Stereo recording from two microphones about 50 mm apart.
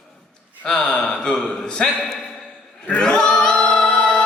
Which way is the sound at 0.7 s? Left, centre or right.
Centre.